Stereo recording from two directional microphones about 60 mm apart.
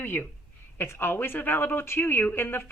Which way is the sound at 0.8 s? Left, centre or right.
Left.